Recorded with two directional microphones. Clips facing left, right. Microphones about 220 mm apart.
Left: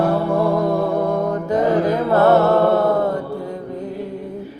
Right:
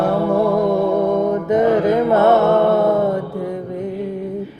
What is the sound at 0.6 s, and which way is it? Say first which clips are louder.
Mantra: right 3 dB; 20° right (ahead or behind).